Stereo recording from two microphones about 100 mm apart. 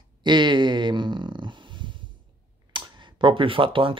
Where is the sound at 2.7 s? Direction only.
50° right (ahead or behind).